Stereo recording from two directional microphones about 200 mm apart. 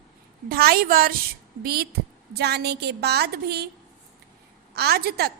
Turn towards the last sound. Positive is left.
turn(degrees=-50)  # may be behind; listen again after turning